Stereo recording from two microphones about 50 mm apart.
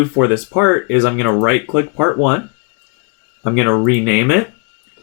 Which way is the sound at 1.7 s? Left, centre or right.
Centre.